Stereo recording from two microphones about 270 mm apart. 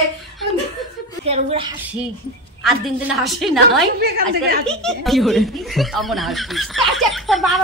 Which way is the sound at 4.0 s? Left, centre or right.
Right.